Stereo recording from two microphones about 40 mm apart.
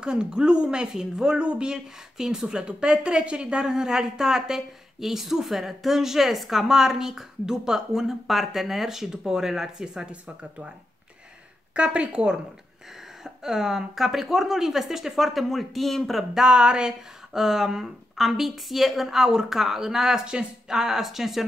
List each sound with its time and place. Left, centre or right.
0.0 s a woman's voice: right
11.7 s a woman's voice: right
13.2 s speech: centre
16.3 s a woman's voice: right
17.3 s speech: centre